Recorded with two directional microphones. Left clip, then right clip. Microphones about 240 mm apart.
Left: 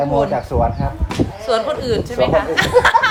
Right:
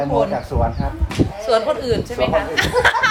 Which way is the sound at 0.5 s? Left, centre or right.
Left.